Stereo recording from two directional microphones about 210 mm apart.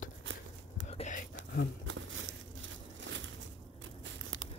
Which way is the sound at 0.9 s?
35° left (ahead or behind).